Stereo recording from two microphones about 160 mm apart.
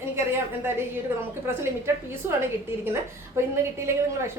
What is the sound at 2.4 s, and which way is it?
A woman's voice, 15° right (ahead or behind).